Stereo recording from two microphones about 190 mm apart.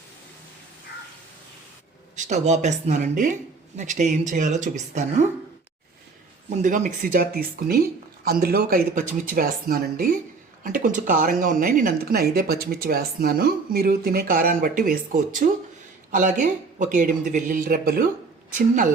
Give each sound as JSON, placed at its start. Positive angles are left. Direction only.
{"t": 2.1, "sound": "speech", "side_deg": -40}
{"t": 6.5, "sound": "speech", "side_deg": -40}